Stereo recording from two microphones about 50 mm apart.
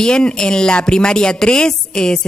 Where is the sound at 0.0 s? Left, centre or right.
Centre.